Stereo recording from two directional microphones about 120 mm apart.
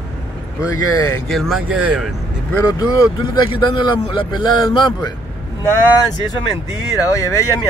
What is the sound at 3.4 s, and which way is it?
Speech, 45° left (ahead or behind).